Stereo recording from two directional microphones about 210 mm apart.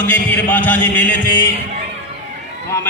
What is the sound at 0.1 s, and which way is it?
Speech, 10° left (ahead or behind).